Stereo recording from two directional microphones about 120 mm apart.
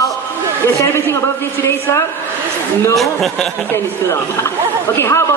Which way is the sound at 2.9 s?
Centre (ahead or behind).